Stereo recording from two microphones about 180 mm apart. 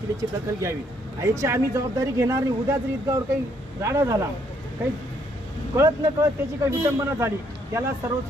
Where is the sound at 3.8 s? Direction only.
15° right (ahead or behind).